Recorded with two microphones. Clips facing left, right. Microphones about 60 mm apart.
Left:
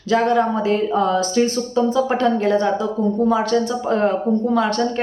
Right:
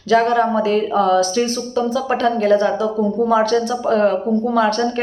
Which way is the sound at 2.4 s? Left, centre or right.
Centre.